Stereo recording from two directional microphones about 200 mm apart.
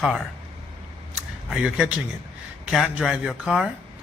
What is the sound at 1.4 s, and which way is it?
Speech, 5° right (ahead or behind).